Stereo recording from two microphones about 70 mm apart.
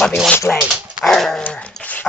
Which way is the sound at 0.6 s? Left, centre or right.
Centre.